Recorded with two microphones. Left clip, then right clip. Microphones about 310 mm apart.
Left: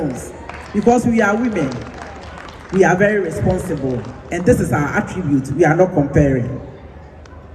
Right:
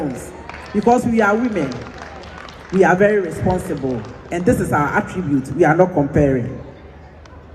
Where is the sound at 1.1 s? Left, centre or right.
Centre.